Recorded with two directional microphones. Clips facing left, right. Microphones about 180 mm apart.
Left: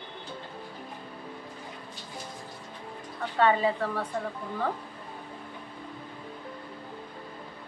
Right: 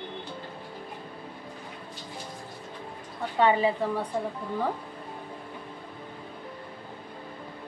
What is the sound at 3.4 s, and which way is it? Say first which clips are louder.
Speech: right 1 dB; 15° right (ahead or behind).